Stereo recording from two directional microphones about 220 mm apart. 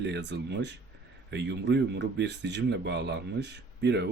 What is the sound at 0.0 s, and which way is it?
Speech, 50° right (ahead or behind).